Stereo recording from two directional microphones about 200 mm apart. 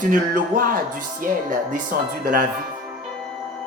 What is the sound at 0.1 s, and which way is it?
Music, 45° right (ahead or behind).